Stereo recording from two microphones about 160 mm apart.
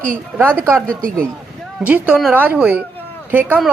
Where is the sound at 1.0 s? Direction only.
60° right (ahead or behind).